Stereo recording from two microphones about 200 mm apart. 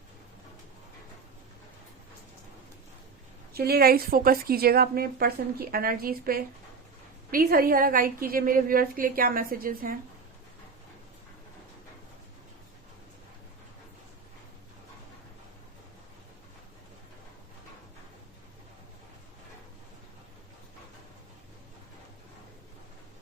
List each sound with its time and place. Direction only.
3.5 s a woman's voice: 50° right (ahead or behind)